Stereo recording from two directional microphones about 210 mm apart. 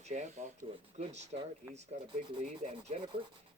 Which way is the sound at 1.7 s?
25° right (ahead or behind).